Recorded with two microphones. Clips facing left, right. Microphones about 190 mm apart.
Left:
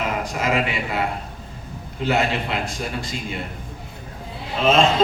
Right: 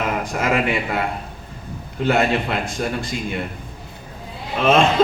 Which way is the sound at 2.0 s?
55° right (ahead or behind).